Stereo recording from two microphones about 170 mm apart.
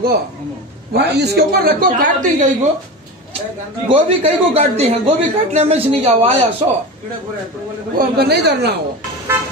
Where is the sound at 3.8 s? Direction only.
35° right (ahead or behind).